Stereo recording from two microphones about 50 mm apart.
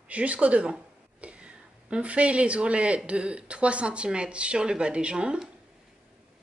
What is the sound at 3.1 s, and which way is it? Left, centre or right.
Speech, right.